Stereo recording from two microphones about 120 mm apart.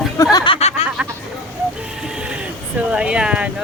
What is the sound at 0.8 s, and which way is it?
Hubbub, 60° left (ahead or behind).